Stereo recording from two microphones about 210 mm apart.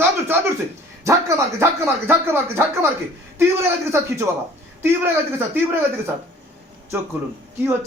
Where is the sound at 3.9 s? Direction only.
15° right (ahead or behind).